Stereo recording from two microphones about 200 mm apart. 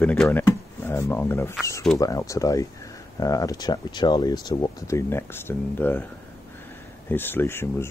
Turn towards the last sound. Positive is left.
turn(degrees=10)  # may be behind; listen again after turning